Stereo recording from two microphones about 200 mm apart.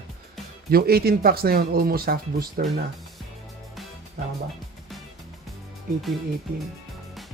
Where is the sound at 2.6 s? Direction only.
Centre (ahead or behind).